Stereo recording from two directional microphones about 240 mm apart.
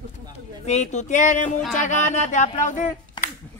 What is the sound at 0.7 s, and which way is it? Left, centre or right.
Speech, left.